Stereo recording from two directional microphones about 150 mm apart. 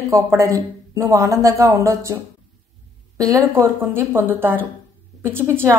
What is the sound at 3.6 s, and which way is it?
A woman's voice, 15° right (ahead or behind).